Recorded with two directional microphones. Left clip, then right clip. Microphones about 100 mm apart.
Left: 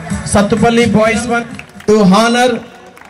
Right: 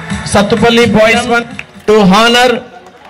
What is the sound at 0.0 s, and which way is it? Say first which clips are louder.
A man's voice: right 3 dB; 15° right (ahead or behind).